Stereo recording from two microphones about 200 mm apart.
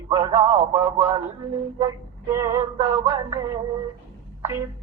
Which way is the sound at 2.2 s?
15° right (ahead or behind).